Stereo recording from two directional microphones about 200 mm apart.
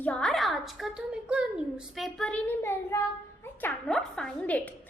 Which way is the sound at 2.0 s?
Centre (ahead or behind).